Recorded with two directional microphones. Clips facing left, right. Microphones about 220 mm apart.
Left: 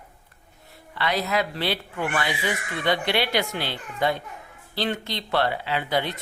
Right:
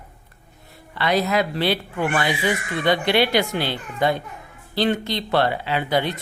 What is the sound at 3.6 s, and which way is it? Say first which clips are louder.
Speech: right 4 dB; 45° right (ahead or behind).